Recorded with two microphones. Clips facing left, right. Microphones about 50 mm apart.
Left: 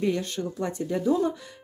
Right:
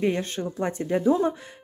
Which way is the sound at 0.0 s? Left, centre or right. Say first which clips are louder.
Right 1 dB; right.